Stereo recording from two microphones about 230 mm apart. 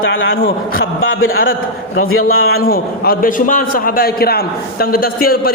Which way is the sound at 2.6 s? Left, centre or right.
Left.